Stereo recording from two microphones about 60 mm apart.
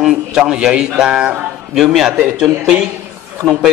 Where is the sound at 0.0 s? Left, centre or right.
Centre.